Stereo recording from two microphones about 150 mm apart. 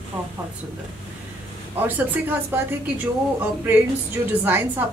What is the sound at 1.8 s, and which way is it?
Speech, 10° right (ahead or behind).